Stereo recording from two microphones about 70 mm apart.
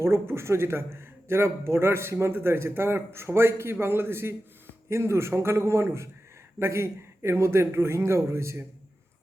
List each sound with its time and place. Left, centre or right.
0.0 s a man's voice: right